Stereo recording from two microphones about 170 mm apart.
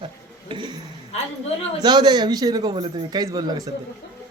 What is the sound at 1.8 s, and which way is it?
A man's voice, 25° right (ahead or behind).